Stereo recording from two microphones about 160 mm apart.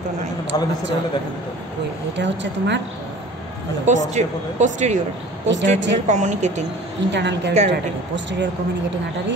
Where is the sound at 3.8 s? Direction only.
50° right (ahead or behind).